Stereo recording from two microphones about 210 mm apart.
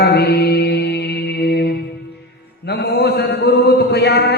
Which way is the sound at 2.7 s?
50° left (ahead or behind).